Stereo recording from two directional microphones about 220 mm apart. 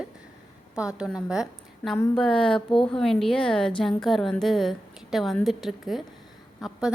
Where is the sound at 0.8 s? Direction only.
5° right (ahead or behind).